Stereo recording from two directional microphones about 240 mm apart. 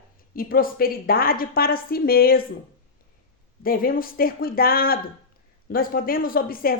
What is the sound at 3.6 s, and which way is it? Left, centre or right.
A woman's voice, left.